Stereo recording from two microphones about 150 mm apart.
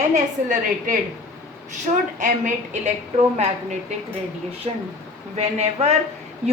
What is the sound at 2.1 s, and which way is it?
A woman's voice, 55° right (ahead or behind).